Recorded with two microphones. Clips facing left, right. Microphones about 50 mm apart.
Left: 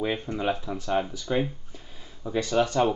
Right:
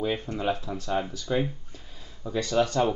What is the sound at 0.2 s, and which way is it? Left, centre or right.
Speech, centre.